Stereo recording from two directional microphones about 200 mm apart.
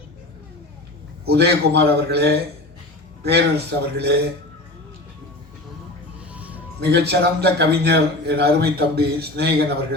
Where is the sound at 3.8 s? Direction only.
55° right (ahead or behind).